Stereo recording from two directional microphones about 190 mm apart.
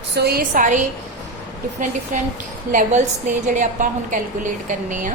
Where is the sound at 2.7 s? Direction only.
40° right (ahead or behind).